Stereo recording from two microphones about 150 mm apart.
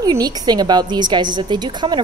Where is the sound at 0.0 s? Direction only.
25° right (ahead or behind).